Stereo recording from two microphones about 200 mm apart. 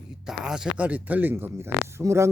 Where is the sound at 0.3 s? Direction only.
5° right (ahead or behind).